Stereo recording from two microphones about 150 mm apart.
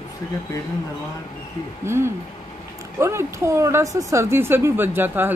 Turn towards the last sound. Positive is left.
turn(degrees=-15)  # may be behind; listen again after turning